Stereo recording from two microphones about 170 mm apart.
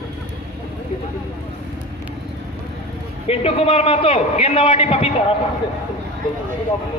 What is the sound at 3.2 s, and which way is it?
A man's voice, 35° left (ahead or behind).